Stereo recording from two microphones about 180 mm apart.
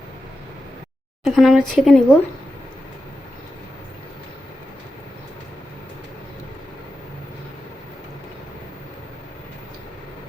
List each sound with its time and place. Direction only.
1.2 s speech: centre (ahead or behind)